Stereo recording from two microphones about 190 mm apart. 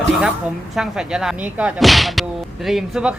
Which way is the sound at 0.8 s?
5° right (ahead or behind).